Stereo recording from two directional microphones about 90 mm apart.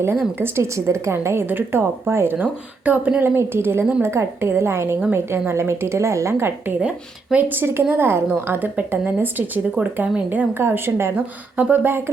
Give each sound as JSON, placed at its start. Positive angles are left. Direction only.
{"t": 0.3, "sound": "a woman's voice", "side_deg": -30}
{"t": 6.8, "sound": "a woman's voice", "side_deg": -10}
{"t": 11.1, "sound": "a woman's voice", "side_deg": -15}